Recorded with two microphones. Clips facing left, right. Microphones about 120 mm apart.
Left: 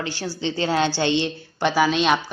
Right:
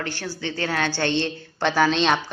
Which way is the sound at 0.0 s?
15° left (ahead or behind).